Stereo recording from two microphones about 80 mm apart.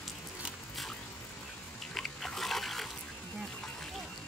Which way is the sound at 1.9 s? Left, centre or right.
Centre.